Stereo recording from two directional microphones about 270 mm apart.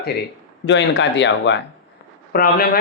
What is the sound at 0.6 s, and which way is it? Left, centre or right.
Speech, left.